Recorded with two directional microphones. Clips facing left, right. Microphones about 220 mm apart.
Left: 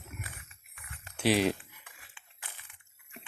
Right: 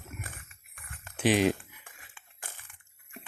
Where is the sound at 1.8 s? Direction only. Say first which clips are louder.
Right 2 dB; 45° right (ahead or behind).